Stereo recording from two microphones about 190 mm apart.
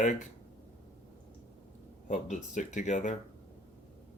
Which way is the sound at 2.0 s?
40° left (ahead or behind).